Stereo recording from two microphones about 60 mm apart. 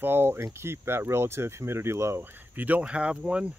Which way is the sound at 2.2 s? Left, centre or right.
Right.